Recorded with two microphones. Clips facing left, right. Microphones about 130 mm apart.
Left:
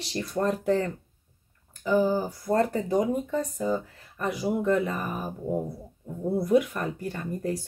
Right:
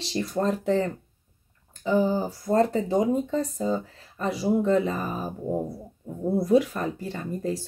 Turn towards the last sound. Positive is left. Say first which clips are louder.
# right 1 dB
turn(degrees=-25)  # may be behind; listen again after turning